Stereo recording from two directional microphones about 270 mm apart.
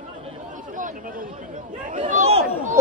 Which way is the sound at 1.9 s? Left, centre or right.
Right.